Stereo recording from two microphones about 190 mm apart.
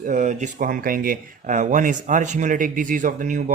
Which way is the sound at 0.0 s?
45° right (ahead or behind).